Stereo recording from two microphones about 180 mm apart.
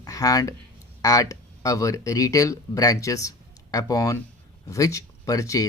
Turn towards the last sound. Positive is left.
turn(degrees=20)  # may be behind; listen again after turning